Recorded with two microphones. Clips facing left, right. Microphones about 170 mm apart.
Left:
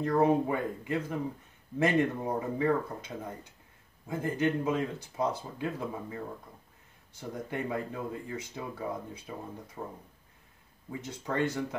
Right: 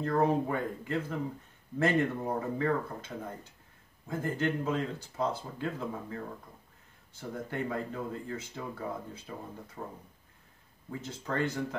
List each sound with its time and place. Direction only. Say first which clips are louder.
0.0 s speech: left 2 dB; 15° left (ahead or behind)